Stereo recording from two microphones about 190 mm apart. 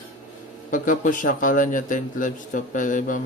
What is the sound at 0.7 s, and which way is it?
A man's voice, 45° left (ahead or behind).